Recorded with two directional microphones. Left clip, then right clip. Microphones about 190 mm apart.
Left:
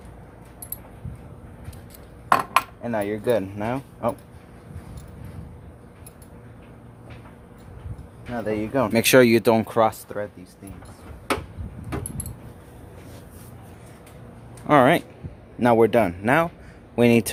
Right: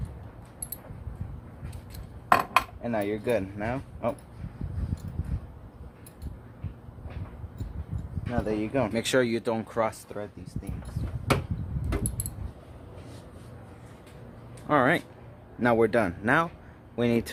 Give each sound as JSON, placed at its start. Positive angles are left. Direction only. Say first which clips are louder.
{"t": 2.3, "sound": "speech", "louder": "left 3 dB", "side_deg": 10}
{"t": 8.3, "sound": "speech", "louder": "left 3 dB", "side_deg": 10}
{"t": 8.9, "sound": "speech", "louder": "left 14 dB", "side_deg": 50}
{"t": 10.1, "sound": "speech", "louder": "left 7 dB", "side_deg": 25}
{"t": 14.7, "sound": "speech", "louder": "left 7 dB", "side_deg": 30}
{"t": 15.6, "sound": "speech", "louder": "left 6 dB", "side_deg": 15}
{"t": 16.9, "sound": "speech", "louder": "left 8 dB", "side_deg": 25}